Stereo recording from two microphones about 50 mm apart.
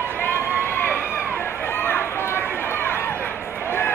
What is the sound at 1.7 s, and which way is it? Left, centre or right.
Run, left.